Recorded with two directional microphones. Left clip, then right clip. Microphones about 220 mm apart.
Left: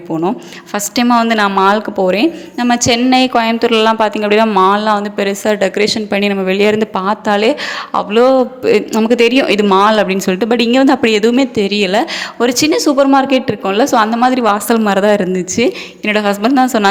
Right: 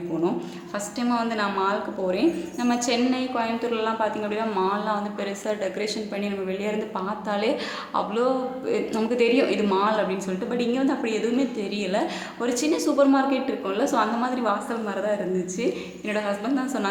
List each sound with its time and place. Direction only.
0.7 s a man's voice: 40° left (ahead or behind)